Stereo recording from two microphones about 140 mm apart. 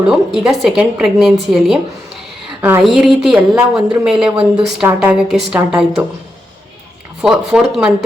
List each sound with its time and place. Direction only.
0.1 s a woman's voice: 5° right (ahead or behind)
2.6 s a woman's voice: 15° right (ahead or behind)
2.8 s a woman's voice: centre (ahead or behind)
7.2 s a woman's voice: 5° right (ahead or behind)